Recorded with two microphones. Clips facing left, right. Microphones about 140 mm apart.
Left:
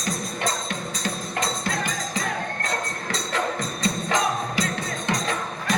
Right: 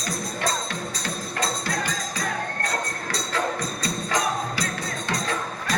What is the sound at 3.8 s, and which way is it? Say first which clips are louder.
Music: left 3 dB; 20° left (ahead or behind).